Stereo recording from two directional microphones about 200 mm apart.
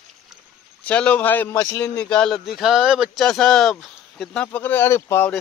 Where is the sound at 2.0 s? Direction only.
5° left (ahead or behind).